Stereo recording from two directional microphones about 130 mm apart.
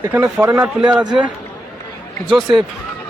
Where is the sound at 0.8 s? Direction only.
5° right (ahead or behind).